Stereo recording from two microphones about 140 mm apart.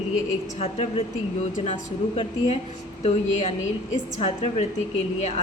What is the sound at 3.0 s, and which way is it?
A woman's voice, 55° left (ahead or behind).